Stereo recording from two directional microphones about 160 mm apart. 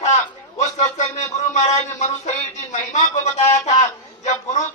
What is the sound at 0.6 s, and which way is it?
Speech, 45° left (ahead or behind).